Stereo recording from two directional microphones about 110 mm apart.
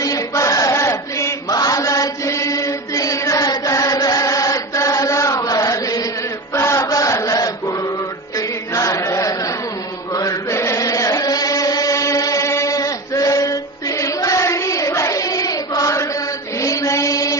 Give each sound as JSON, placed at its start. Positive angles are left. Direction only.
{"t": 0.0, "sound": "chant", "side_deg": 30}